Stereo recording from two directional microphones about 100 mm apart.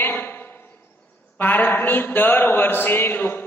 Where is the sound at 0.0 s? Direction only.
20° left (ahead or behind).